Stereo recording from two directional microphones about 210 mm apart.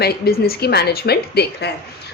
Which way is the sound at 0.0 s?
45° left (ahead or behind).